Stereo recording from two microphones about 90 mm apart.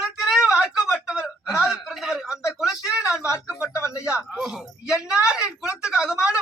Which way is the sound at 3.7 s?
35° left (ahead or behind).